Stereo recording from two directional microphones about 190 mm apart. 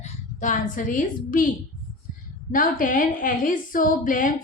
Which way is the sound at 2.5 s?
45° left (ahead or behind).